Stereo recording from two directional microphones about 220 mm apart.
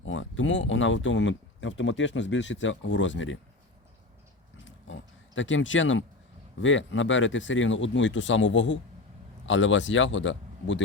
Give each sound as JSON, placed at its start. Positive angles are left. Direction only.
{"t": 0.0, "sound": "speech", "side_deg": 60}
{"t": 4.6, "sound": "pig", "side_deg": 60}
{"t": 6.6, "sound": "speech", "side_deg": 60}